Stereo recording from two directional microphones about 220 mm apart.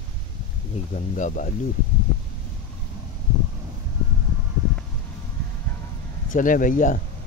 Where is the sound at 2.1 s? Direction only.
10° left (ahead or behind).